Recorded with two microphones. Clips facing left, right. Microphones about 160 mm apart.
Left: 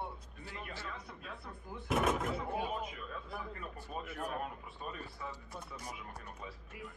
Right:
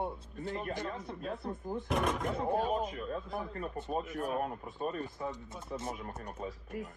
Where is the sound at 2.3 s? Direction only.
40° right (ahead or behind).